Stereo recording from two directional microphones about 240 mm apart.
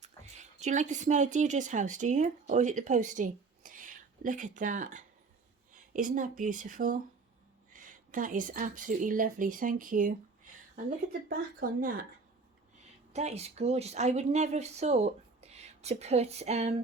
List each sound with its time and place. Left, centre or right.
0.0 s a woman's voice: right
11.3 s speech: right
13.1 s speech: right